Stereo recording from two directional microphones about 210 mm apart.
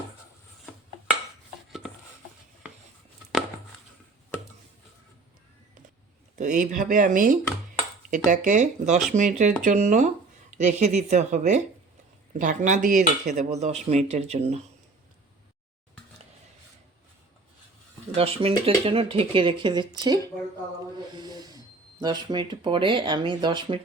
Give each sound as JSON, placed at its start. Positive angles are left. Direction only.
{"t": 6.3, "sound": "speech", "side_deg": -35}
{"t": 18.1, "sound": "speech", "side_deg": -25}
{"t": 21.2, "sound": "a sound", "side_deg": -20}
{"t": 22.0, "sound": "speech", "side_deg": -20}